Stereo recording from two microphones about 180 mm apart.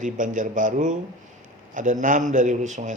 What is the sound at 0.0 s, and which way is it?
A man's voice, 45° right (ahead or behind).